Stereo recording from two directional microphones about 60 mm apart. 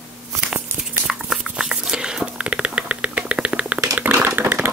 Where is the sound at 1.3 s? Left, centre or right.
Centre.